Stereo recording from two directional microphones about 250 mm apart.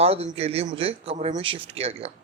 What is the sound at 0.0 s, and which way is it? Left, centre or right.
A woman's voice, right.